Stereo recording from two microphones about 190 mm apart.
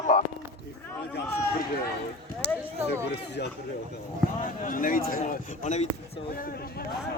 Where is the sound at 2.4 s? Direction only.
60° left (ahead or behind).